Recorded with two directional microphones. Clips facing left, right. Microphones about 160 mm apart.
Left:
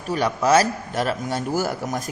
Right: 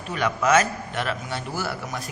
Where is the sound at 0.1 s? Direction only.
35° left (ahead or behind).